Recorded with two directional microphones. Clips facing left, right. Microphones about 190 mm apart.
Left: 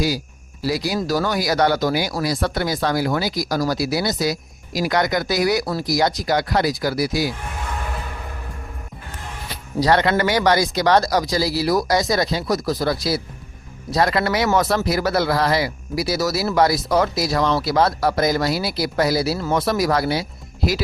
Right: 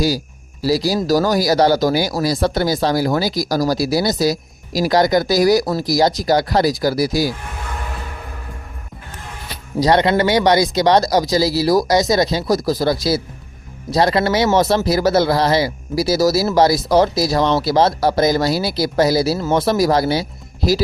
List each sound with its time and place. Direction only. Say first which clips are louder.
0.6 s speech: right 5 dB; 35° right (ahead or behind)
9.8 s speech: right 3 dB; 20° right (ahead or behind)
11.9 s speech: right 4 dB; 20° right (ahead or behind)
16.0 s speech: right 6 dB; 40° right (ahead or behind)
19.4 s speech: right 4 dB; 25° right (ahead or behind)